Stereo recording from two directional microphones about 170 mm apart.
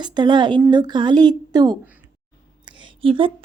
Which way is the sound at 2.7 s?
30° right (ahead or behind).